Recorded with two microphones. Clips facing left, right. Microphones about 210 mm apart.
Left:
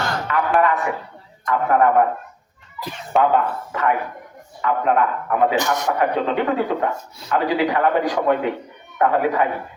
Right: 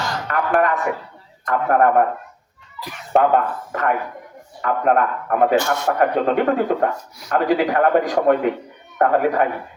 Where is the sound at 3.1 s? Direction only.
45° right (ahead or behind).